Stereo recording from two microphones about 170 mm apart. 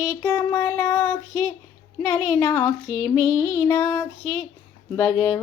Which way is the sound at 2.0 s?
15° left (ahead or behind).